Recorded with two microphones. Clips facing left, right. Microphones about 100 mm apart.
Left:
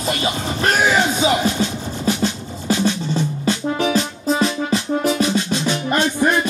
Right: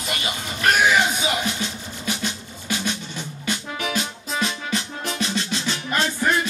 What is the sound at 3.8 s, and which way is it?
Music, 35° left (ahead or behind).